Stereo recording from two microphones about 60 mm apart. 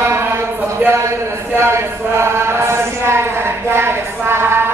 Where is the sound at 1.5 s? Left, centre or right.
Right.